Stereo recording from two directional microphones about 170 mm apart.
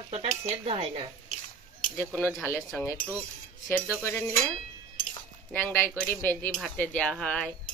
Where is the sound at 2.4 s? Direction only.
10° left (ahead or behind).